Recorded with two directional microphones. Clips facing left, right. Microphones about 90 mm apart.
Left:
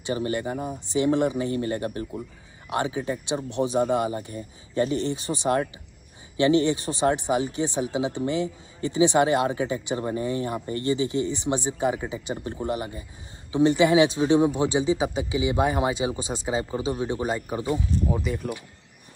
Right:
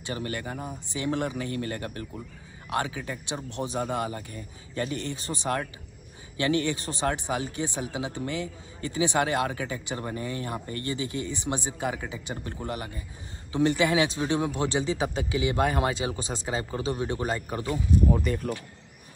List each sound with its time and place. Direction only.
0.0 s speech: 20° left (ahead or behind)
18.1 s speech: 5° left (ahead or behind)